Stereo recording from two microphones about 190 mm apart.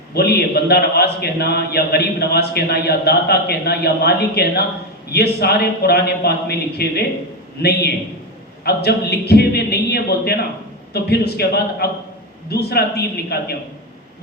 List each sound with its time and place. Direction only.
0.1 s a man's voice: 55° left (ahead or behind)